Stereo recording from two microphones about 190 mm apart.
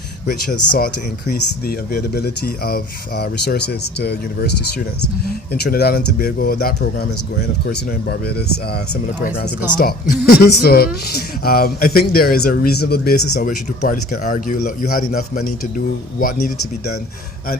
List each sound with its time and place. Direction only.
0.3 s speech: 50° left (ahead or behind)
5.6 s speech: 55° left (ahead or behind)
9.7 s speech: 55° left (ahead or behind)